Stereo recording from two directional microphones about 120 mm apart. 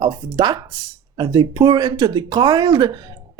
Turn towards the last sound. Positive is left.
turn(degrees=-35)  # may be behind; listen again after turning